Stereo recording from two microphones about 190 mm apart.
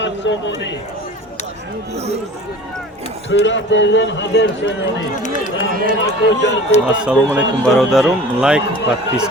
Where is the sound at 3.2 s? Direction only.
75° left (ahead or behind).